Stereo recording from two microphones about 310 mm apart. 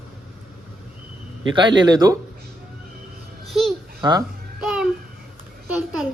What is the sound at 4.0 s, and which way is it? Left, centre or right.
Speech, centre.